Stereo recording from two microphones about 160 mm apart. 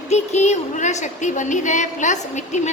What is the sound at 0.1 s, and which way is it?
A woman's voice, 45° left (ahead or behind).